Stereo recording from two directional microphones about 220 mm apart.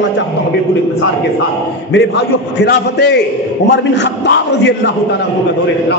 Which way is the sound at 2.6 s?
50° left (ahead or behind).